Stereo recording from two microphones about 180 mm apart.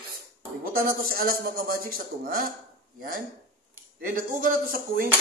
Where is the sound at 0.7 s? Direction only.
55° right (ahead or behind).